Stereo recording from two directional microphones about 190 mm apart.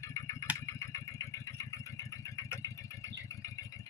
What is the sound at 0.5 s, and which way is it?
Vehicle, 15° left (ahead or behind).